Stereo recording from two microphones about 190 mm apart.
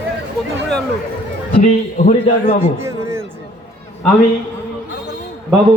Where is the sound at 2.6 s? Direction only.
15° right (ahead or behind).